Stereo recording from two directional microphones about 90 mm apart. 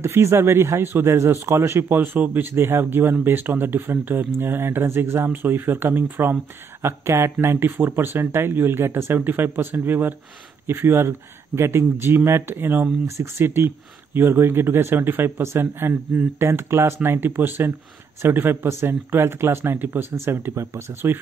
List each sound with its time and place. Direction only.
0.0 s a man's voice: 30° right (ahead or behind)